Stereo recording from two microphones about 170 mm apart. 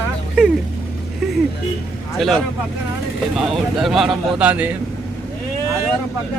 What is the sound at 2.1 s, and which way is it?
Speech, centre (ahead or behind).